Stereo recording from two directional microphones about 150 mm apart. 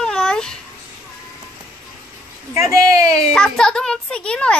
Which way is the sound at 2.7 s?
25° right (ahead or behind).